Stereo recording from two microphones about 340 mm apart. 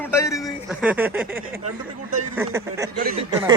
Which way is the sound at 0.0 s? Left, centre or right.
Centre.